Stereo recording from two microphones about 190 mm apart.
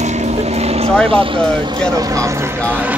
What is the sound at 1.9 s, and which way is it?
Speech, 15° right (ahead or behind).